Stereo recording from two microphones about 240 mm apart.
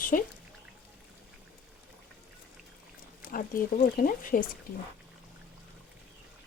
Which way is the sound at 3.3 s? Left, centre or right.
Left.